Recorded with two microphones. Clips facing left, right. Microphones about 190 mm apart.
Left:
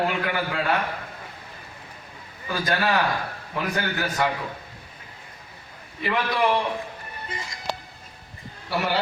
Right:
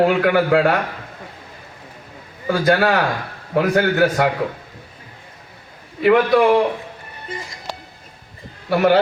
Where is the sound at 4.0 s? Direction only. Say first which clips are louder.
Right 9 dB; 75° right (ahead or behind).